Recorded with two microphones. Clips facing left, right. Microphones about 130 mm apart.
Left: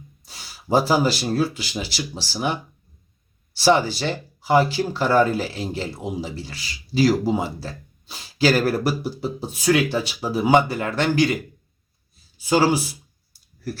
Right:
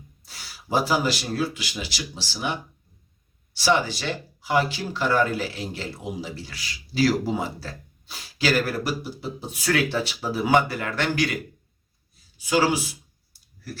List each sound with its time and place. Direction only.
0.3 s speech: 25° left (ahead or behind); by 2.5 s 40° left (ahead or behind)
3.5 s speech: 35° left (ahead or behind)
9.6 s speech: 20° left (ahead or behind)
12.5 s speech: 40° left (ahead or behind)